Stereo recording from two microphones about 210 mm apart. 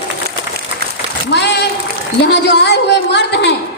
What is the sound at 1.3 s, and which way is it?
A woman's voice, 55° left (ahead or behind).